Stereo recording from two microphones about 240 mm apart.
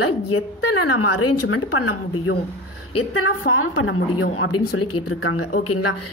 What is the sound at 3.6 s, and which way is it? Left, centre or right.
A woman's voice, left.